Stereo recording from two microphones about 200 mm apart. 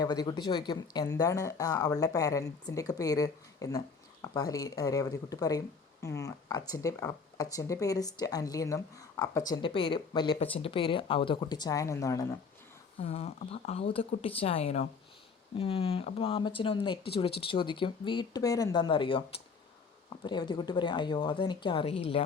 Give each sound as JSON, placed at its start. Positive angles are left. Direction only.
{"t": 0.0, "sound": "speech", "side_deg": 20}
{"t": 13.0, "sound": "speech", "side_deg": 30}